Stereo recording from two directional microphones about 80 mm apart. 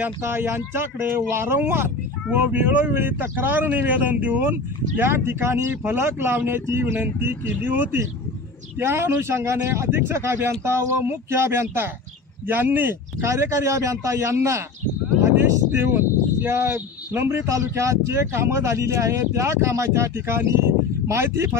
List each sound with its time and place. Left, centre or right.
0.2 s speech: right
15.7 s speech: right